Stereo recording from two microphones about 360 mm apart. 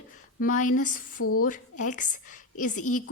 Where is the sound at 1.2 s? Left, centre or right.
Left.